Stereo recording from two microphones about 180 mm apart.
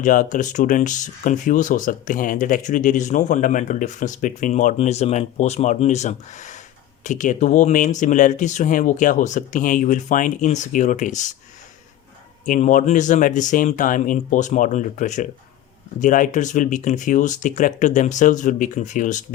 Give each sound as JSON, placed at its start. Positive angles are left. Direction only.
{"t": 0.0, "sound": "speech", "side_deg": 45}
{"t": 12.5, "sound": "speech", "side_deg": 45}